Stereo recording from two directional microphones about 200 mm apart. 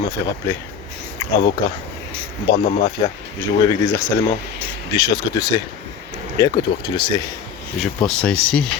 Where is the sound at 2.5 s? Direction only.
45° left (ahead or behind).